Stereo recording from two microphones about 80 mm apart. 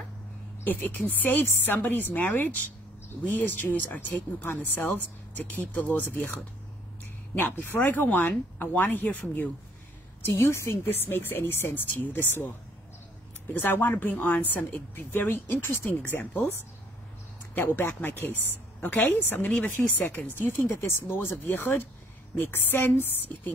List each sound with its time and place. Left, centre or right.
0.7 s speech: left
7.3 s speech: left
10.2 s speech: left
13.5 s speech: left
17.6 s speech: left